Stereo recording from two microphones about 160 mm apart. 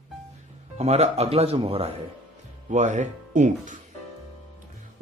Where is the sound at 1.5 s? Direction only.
25° right (ahead or behind).